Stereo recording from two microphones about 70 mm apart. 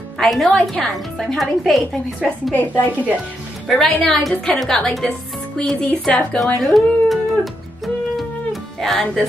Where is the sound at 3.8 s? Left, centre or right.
Centre.